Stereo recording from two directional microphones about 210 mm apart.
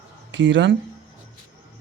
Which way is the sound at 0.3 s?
60° right (ahead or behind).